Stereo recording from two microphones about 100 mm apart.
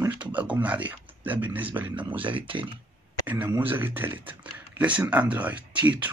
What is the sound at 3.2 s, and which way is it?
Speech, 20° right (ahead or behind).